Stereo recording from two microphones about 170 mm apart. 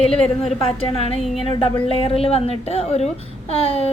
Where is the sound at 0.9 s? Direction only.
35° left (ahead or behind).